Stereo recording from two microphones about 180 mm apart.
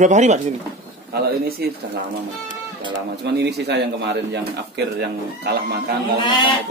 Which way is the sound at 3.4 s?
65° right (ahead or behind).